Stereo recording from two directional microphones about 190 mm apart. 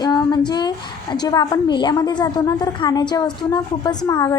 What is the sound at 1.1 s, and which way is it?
A woman's voice, 20° left (ahead or behind).